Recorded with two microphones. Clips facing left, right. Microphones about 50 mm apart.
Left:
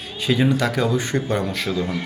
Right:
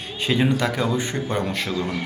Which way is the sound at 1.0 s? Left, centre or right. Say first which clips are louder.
Left 2 dB; right.